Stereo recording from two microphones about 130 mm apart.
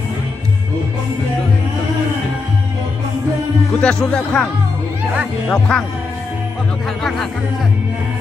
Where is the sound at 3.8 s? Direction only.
5° left (ahead or behind).